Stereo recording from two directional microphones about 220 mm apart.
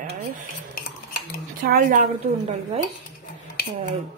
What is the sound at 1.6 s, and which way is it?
A woman's voice, 40° right (ahead or behind).